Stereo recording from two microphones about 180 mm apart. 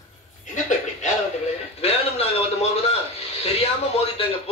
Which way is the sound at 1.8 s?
35° left (ahead or behind).